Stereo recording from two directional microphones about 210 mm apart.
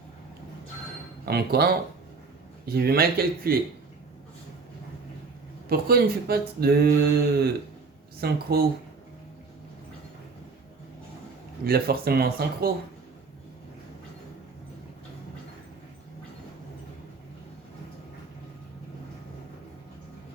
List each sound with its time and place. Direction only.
1.2 s speech: 50° right (ahead or behind)
5.6 s speech: 45° right (ahead or behind)
11.6 s speech: 45° right (ahead or behind)